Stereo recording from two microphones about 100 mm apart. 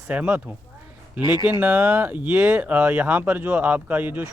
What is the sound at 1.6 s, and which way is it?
A man's voice, 15° right (ahead or behind).